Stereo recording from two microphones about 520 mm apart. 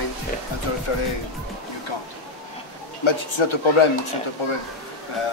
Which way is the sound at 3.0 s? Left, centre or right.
Left.